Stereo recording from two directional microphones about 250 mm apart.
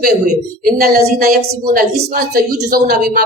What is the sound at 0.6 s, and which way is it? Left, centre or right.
A woman's voice, right.